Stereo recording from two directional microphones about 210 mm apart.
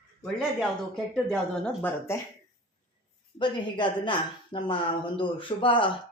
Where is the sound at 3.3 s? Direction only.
20° left (ahead or behind).